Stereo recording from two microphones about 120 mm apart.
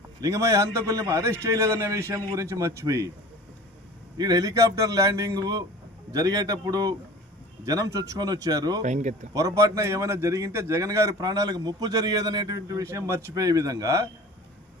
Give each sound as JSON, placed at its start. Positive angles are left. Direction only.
{"t": 0.2, "sound": "a man's voice", "side_deg": -25}
{"t": 4.2, "sound": "a man's voice", "side_deg": -30}
{"t": 8.8, "sound": "speech", "side_deg": -85}
{"t": 9.3, "sound": "a man's voice", "side_deg": -25}